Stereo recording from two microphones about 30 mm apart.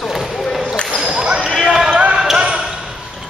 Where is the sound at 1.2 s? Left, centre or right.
Right.